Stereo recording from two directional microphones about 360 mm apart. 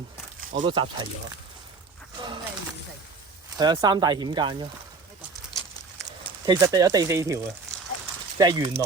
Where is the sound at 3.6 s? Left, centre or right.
Centre.